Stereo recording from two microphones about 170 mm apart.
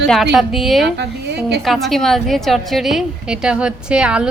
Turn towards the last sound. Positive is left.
turn(degrees=-5)  # may be behind; listen again after turning